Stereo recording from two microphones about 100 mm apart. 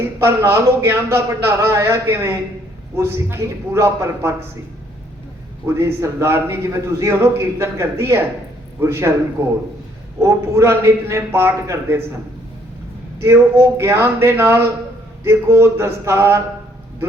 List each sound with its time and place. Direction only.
0.0 s a man's voice: 25° right (ahead or behind)
5.6 s a man's voice: 25° right (ahead or behind)
10.2 s a man's voice: 25° right (ahead or behind)
13.1 s a man's voice: 25° right (ahead or behind)